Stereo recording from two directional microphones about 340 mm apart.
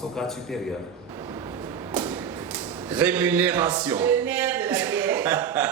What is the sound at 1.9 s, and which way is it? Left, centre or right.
Thump, centre.